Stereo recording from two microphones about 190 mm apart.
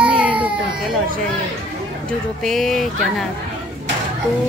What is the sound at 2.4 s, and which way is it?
Speech, centre (ahead or behind).